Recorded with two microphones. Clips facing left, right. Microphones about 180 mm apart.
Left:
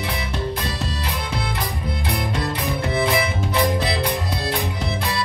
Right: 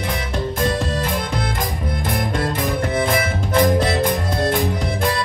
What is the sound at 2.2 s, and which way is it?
Music, 50° right (ahead or behind).